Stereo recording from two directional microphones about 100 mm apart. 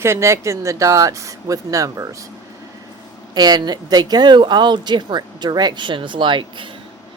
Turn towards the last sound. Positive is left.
turn(degrees=-55)  # may be behind; listen again after turning